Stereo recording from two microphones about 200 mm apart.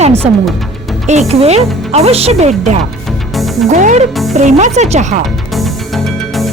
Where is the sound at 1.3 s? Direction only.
30° right (ahead or behind).